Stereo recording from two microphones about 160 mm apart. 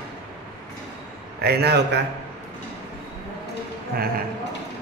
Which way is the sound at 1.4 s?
85° right.